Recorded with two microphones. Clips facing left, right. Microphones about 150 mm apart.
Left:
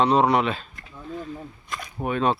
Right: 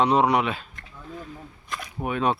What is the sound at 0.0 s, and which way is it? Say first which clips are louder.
Speech: left 1 dB; 10° right (ahead or behind).